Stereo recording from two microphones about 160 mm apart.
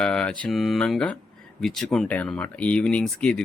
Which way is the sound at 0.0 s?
5° left (ahead or behind).